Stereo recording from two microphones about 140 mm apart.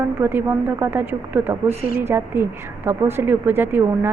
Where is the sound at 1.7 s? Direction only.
50° right (ahead or behind).